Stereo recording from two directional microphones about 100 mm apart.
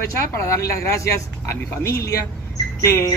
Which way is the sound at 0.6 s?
30° left (ahead or behind).